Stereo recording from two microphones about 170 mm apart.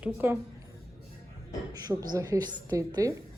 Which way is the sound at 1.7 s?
20° right (ahead or behind).